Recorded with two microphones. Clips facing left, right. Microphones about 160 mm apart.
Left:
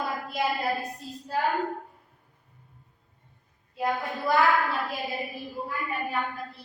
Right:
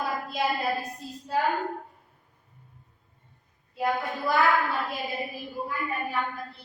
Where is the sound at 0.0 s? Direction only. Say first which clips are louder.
Even; centre (ahead or behind).